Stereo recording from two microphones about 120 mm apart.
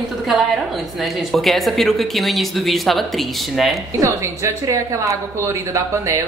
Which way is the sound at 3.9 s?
25° right (ahead or behind).